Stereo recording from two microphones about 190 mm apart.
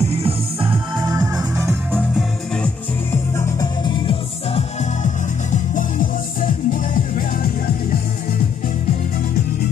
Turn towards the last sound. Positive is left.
turn(degrees=45)  # may be behind; listen again after turning